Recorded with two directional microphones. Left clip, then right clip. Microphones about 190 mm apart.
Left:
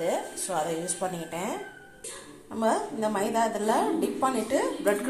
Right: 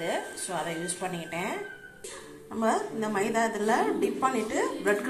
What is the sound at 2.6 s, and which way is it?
A woman's voice, 10° left (ahead or behind).